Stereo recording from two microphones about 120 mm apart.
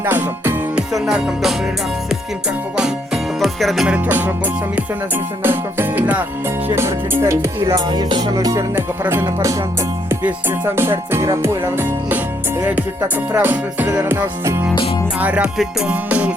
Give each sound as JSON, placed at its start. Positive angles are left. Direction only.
{"t": 0.0, "sound": "music", "side_deg": -15}
{"t": 0.9, "sound": "music", "side_deg": 0}
{"t": 3.4, "sound": "music", "side_deg": 0}
{"t": 3.9, "sound": "music", "side_deg": -15}
{"t": 5.4, "sound": "music", "side_deg": -20}
{"t": 7.9, "sound": "music", "side_deg": -40}
{"t": 8.7, "sound": "music", "side_deg": -20}
{"t": 10.8, "sound": "music", "side_deg": -20}